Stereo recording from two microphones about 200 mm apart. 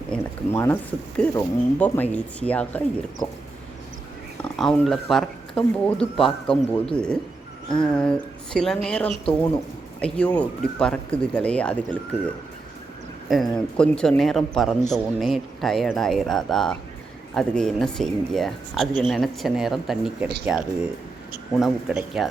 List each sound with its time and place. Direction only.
0.1 s speech: 10° left (ahead or behind)
4.5 s a man's voice: centre (ahead or behind)
13.3 s a man's voice: centre (ahead or behind)